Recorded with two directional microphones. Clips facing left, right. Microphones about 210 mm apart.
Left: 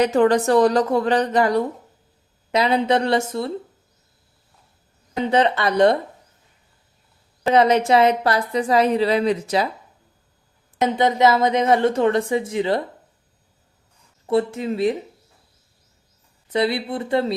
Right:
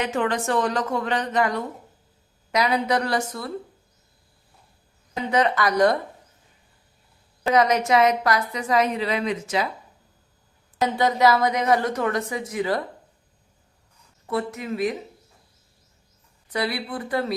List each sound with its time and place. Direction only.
0.0 s a woman's voice: 40° left (ahead or behind)
5.2 s a woman's voice: 30° left (ahead or behind)
7.4 s a woman's voice: 30° left (ahead or behind)
10.8 s a woman's voice: 20° left (ahead or behind)
14.3 s a woman's voice: 30° left (ahead or behind)
16.5 s a woman's voice: 25° left (ahead or behind)